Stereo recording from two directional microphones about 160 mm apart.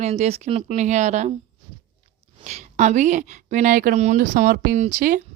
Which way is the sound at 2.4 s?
45° right (ahead or behind).